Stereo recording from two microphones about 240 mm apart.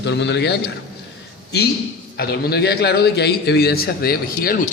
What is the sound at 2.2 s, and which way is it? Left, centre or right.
A man's voice, left.